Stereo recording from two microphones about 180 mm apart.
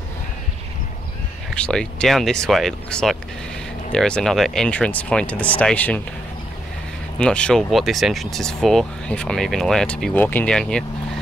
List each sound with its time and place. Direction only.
1.5 s speech: 5° left (ahead or behind)
7.2 s speech: 5° left (ahead or behind)